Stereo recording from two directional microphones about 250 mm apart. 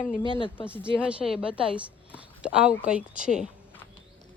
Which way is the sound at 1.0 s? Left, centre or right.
Centre.